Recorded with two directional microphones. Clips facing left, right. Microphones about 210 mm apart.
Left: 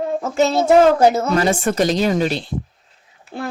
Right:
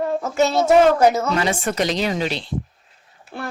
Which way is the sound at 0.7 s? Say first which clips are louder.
Left 2 dB; 30° left (ahead or behind).